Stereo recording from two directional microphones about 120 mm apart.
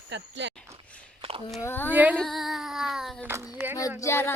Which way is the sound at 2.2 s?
Centre (ahead or behind).